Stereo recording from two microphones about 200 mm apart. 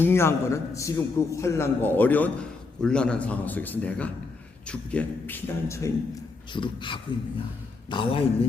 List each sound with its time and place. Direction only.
0.0 s a man's voice: 10° left (ahead or behind)
6.5 s speech: 25° left (ahead or behind)